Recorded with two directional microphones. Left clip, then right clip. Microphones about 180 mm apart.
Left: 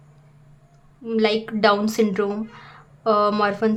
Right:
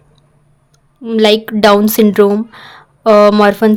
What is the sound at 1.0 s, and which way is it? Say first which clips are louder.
Speech: right 10 dB; 45° right (ahead or behind).